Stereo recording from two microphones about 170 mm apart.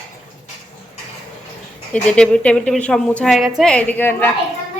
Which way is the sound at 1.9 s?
5° left (ahead or behind).